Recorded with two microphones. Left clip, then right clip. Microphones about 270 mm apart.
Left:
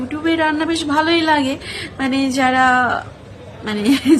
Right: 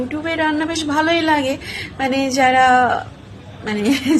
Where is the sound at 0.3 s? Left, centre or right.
Centre.